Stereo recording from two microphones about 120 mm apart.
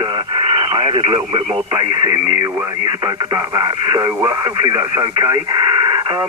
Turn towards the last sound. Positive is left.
turn(degrees=-40)  # may be behind; listen again after turning